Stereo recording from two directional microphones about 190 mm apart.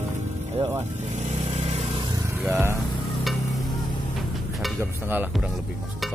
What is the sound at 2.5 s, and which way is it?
Speech, 15° right (ahead or behind).